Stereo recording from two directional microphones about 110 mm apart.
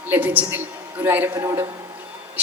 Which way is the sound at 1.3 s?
25° right (ahead or behind).